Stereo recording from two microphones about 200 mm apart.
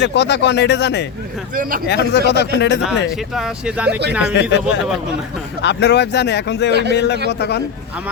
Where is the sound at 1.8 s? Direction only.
55° left (ahead or behind).